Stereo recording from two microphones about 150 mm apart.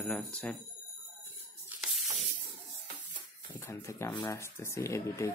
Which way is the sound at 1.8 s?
Centre (ahead or behind).